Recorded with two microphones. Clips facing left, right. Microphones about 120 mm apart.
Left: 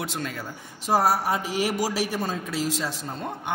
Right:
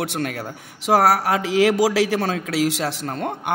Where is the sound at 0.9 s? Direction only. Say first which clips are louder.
Right 5 dB; 90° right.